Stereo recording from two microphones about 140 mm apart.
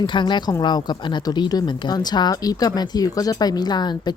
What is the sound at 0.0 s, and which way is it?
Speech, 35° left (ahead or behind).